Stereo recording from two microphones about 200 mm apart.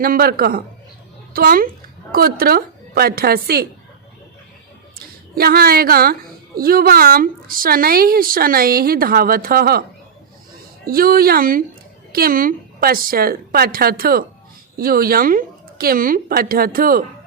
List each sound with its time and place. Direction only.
0.0 s a woman's voice: 50° right (ahead or behind)
4.9 s a woman's voice: 50° right (ahead or behind)
10.8 s a woman's voice: 50° right (ahead or behind)